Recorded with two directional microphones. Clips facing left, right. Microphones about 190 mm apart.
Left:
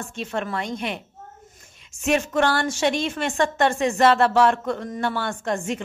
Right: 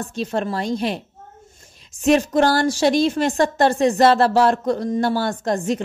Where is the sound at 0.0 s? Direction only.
35° right (ahead or behind).